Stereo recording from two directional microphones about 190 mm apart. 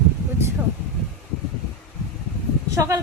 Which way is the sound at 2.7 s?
15° right (ahead or behind).